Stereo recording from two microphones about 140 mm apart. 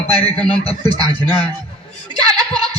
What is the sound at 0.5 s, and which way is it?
Speech, 45° left (ahead or behind).